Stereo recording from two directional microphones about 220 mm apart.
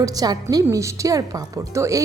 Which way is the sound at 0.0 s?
15° right (ahead or behind).